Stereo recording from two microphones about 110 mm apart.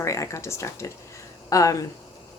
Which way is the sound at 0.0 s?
30° left (ahead or behind).